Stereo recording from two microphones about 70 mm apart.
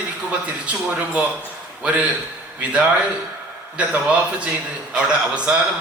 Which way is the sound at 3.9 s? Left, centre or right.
Centre.